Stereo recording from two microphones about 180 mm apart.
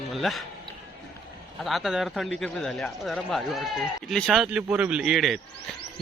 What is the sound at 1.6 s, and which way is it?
A man's voice, centre (ahead or behind).